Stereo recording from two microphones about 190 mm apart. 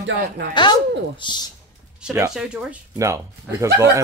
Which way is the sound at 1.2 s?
25° left (ahead or behind).